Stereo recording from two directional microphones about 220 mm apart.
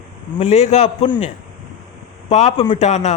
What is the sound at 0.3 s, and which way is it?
Speech, 30° left (ahead or behind).